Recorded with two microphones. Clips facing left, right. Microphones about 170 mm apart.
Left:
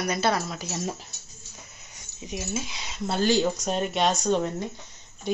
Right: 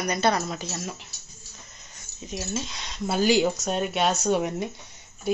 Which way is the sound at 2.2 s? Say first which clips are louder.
Even; 10° left (ahead or behind).